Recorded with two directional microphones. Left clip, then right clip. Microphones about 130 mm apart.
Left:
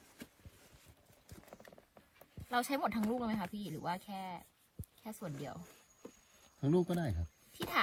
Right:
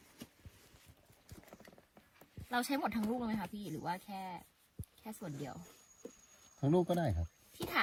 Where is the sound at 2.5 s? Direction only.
40° left (ahead or behind).